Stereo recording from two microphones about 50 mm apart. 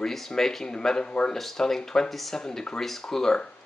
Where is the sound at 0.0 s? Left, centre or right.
Centre.